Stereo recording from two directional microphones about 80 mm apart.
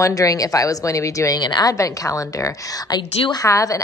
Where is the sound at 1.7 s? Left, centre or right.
Left.